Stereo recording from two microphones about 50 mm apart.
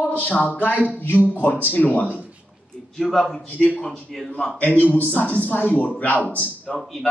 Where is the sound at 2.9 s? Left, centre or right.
Centre.